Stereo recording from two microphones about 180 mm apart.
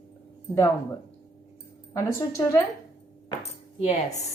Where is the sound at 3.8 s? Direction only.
40° left (ahead or behind).